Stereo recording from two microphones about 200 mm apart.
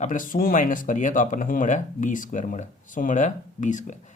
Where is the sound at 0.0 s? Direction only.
40° left (ahead or behind).